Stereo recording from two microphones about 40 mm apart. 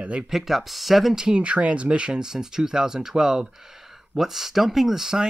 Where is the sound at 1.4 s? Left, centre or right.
Right.